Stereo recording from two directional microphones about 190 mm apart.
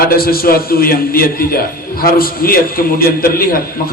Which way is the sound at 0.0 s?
50° left (ahead or behind).